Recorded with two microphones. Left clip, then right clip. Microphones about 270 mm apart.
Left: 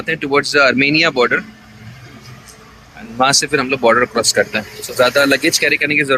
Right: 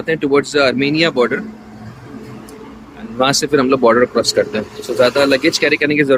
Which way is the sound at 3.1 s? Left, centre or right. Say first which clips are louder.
Even; centre.